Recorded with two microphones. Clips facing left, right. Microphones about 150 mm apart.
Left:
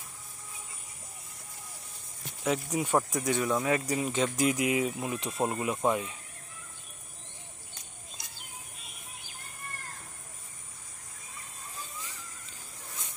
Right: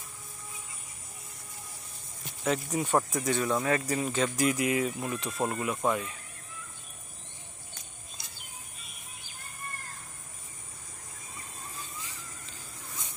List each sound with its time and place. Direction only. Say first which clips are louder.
2.4 s speech: even; 10° left (ahead or behind)